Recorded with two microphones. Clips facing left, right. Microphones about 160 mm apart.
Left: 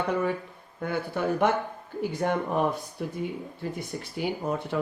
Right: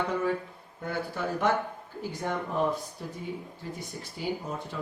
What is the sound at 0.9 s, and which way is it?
Speech, 60° left (ahead or behind).